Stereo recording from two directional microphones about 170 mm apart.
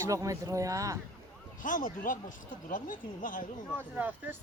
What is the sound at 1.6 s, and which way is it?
Speech, 50° left (ahead or behind).